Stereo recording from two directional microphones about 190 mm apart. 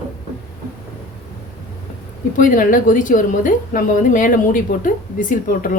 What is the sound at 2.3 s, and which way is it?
A woman's voice, 45° left (ahead or behind).